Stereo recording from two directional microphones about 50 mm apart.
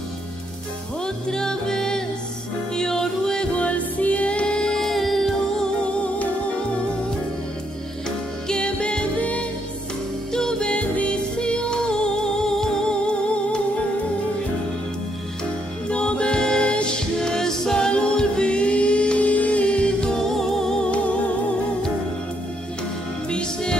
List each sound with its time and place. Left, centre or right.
1.0 s music: centre
3.5 s music: left; by 5.7 s centre
8.5 s music: left
10.3 s music: centre
10.7 s music: left
15.9 s music: left
20.2 s music: centre
23.3 s music: centre